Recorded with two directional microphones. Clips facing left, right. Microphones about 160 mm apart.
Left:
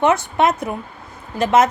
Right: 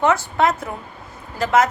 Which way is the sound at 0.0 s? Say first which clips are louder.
Left 2 dB; 20° left (ahead or behind).